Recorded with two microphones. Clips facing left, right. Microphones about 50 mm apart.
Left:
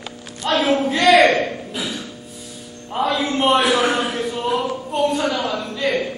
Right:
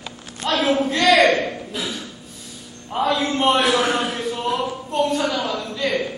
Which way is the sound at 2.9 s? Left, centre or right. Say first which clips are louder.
Even; centre.